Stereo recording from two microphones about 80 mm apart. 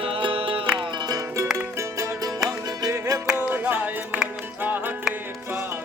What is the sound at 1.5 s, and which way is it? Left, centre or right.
Music, right.